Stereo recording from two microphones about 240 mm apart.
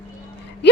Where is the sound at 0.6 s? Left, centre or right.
Left.